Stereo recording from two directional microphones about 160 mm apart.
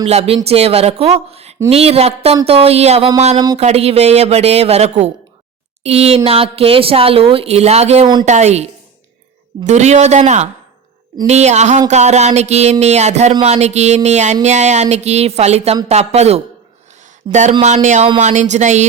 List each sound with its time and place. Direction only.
0.1 s speech: 40° right (ahead or behind)
3.3 s speech: 25° right (ahead or behind)
3.6 s speech: 40° right (ahead or behind)
9.6 s speech: 45° right (ahead or behind)
17.8 s speech: 50° right (ahead or behind)